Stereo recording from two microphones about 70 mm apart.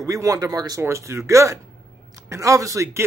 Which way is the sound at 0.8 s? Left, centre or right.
Right.